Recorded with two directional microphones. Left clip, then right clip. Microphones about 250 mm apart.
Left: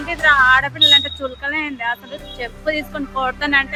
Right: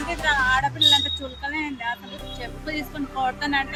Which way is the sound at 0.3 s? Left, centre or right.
Centre.